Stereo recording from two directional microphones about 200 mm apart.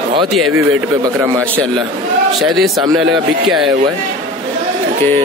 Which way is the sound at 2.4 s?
Centre (ahead or behind).